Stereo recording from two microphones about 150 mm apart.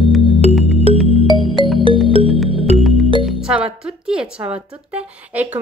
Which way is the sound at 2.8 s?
Centre (ahead or behind).